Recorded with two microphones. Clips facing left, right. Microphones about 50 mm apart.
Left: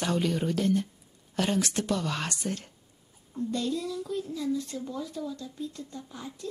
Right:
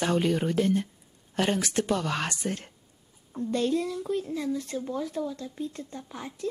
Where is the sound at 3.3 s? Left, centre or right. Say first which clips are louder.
Right 4 dB; right.